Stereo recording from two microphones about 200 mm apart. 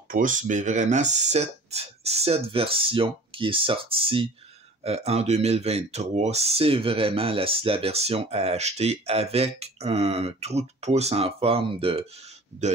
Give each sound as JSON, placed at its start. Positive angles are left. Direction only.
{"t": 0.1, "sound": "speech", "side_deg": -40}